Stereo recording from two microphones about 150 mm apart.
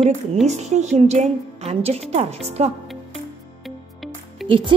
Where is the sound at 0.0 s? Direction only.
45° right (ahead or behind).